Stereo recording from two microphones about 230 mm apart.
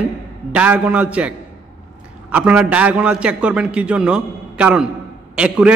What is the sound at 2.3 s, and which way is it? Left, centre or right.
A man's voice, centre.